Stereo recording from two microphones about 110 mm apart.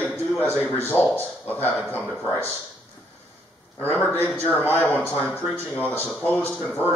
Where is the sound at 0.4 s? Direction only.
10° left (ahead or behind).